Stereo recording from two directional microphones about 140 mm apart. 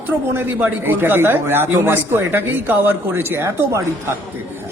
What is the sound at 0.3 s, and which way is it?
A man's voice, 15° right (ahead or behind).